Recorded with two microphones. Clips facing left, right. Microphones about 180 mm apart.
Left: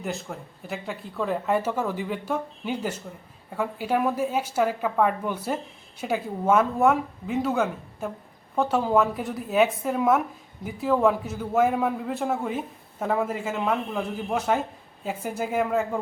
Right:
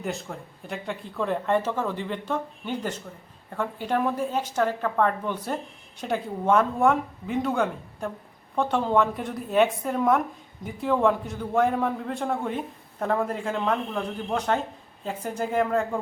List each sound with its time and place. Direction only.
0.0 s speech: centre (ahead or behind)